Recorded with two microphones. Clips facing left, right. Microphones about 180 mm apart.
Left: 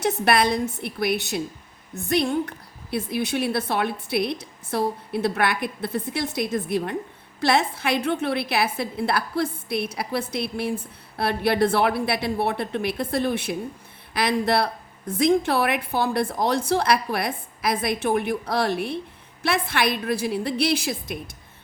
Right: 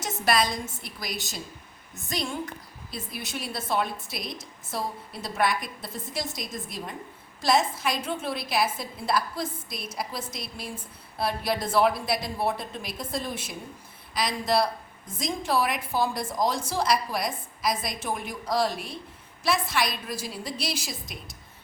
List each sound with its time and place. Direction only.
0.0 s a woman's voice: 60° left (ahead or behind)